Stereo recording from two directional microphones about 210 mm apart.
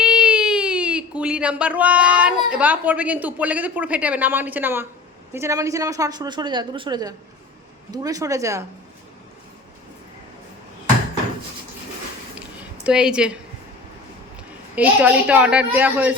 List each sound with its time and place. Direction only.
0.0 s a woman's voice: 5° right (ahead or behind)
12.8 s speech: 5° right (ahead or behind)
14.8 s a woman's voice: 5° right (ahead or behind)